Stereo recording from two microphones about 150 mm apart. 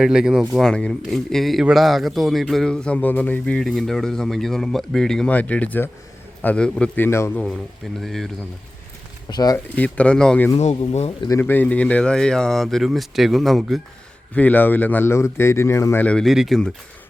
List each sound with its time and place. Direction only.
0.0 s a man's voice: 5° right (ahead or behind)
9.3 s speech: 25° left (ahead or behind)
9.7 s a man's voice: 10° left (ahead or behind)
14.3 s a man's voice: 10° left (ahead or behind)